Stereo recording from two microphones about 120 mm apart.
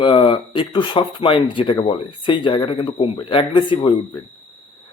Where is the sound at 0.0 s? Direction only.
45° left (ahead or behind).